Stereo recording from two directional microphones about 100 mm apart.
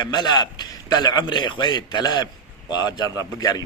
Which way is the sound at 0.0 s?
45° left (ahead or behind).